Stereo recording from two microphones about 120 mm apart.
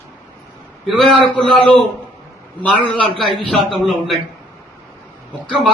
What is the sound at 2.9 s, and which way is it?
Speech, 45° right (ahead or behind).